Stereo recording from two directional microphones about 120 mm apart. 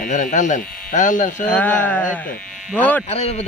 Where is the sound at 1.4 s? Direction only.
15° left (ahead or behind).